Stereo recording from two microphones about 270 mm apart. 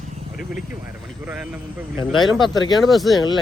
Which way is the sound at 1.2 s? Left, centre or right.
Centre.